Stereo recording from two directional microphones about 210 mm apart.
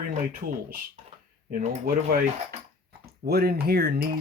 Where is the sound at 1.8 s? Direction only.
40° right (ahead or behind).